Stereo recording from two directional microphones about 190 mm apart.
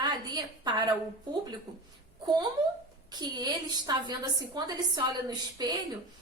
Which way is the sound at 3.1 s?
20° right (ahead or behind).